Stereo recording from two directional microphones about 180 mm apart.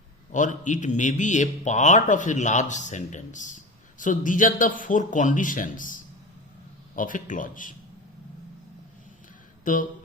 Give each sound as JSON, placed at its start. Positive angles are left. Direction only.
{"t": 0.3, "sound": "a man's voice", "side_deg": 45}
{"t": 9.7, "sound": "a man's voice", "side_deg": 45}